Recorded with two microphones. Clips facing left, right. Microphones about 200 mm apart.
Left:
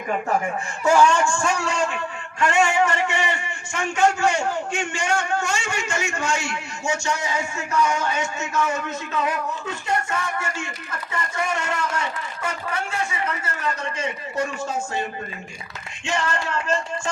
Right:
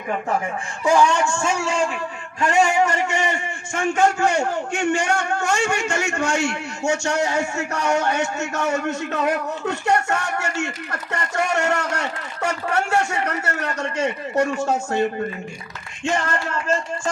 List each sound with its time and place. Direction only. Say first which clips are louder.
0.9 s a man's voice: even; 20° right (ahead or behind); by 15.0 s 70° right (ahead or behind)
16.0 s music: right 2 dB; 50° right (ahead or behind)